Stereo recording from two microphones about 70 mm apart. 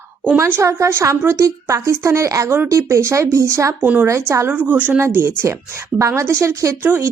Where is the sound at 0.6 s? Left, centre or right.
Right.